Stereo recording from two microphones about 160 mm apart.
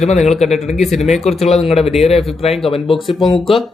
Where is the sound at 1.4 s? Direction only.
40° left (ahead or behind).